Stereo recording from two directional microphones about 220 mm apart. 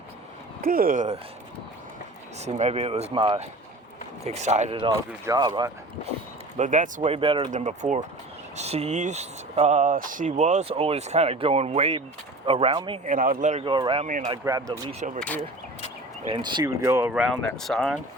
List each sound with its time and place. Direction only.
0.6 s speech: 40° right (ahead or behind)
2.4 s speech: 30° right (ahead or behind)
5.2 s speech: 15° right (ahead or behind)
6.6 s speech: 35° right (ahead or behind)
13.1 s speech: 40° right (ahead or behind)
16.2 s speech: 20° right (ahead or behind); by 18.0 s centre (ahead or behind)